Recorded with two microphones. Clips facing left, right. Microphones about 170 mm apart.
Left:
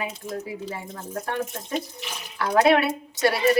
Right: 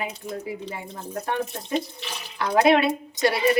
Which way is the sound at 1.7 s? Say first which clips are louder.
Right 2 dB; 10° left (ahead or behind).